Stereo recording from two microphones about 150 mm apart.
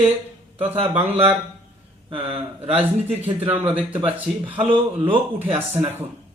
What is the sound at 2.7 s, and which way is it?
Speech, 10° right (ahead or behind).